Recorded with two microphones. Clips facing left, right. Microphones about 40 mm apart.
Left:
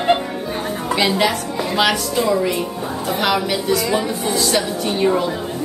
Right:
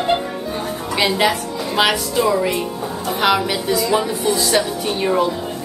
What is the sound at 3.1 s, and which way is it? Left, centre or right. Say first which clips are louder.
Speech: right 2 dB; centre.